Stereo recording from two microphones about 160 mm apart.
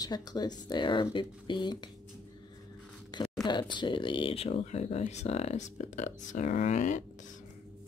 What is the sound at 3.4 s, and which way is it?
Speech, 30° left (ahead or behind).